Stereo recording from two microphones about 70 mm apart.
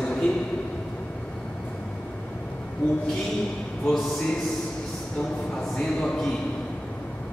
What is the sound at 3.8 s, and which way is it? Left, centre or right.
Speech, centre.